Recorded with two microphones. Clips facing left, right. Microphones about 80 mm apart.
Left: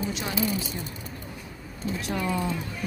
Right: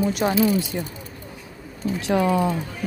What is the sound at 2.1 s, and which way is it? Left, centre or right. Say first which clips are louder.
Speech: right 10 dB; right.